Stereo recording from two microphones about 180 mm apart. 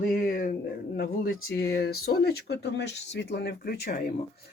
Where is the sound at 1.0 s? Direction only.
60° left (ahead or behind).